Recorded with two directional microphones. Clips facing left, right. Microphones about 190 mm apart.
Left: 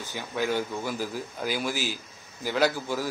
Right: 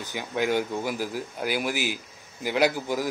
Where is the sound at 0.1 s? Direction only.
15° right (ahead or behind).